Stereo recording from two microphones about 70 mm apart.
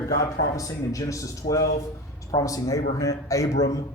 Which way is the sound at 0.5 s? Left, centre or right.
Left.